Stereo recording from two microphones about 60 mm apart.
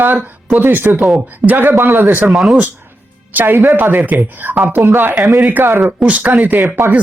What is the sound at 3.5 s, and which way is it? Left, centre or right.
Speech, right.